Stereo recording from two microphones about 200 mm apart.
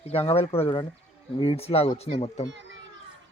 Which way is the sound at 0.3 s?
30° left (ahead or behind).